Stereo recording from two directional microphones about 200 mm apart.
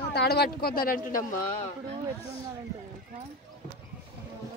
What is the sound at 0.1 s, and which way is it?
Speech, 55° left (ahead or behind).